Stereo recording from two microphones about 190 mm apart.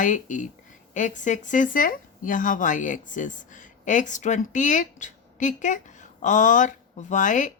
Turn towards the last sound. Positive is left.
turn(degrees=40)  # may be behind; listen again after turning